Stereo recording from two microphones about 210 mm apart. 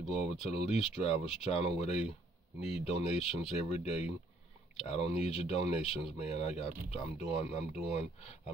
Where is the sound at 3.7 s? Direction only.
30° left (ahead or behind).